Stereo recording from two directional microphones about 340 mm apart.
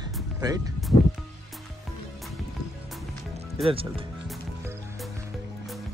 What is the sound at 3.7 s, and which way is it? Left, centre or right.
Speech, centre.